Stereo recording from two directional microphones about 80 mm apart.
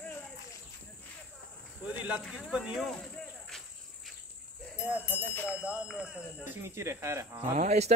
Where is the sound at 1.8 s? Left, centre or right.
Centre.